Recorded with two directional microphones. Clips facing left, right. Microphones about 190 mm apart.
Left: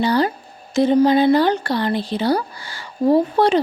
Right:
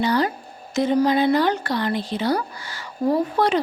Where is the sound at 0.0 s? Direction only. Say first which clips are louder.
Left 3 dB; 30° left (ahead or behind).